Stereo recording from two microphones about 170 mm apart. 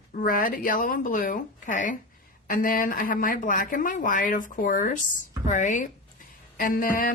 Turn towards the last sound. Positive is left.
turn(degrees=55)  # may be behind; listen again after turning